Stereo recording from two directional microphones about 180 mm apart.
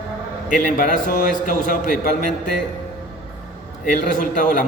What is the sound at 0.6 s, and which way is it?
A man's voice, 50° left (ahead or behind).